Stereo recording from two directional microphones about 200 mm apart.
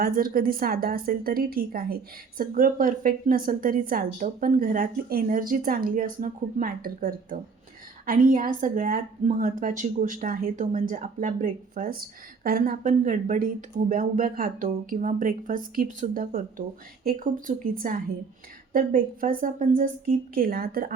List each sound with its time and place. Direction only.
0.0 s speech: 45° right (ahead or behind)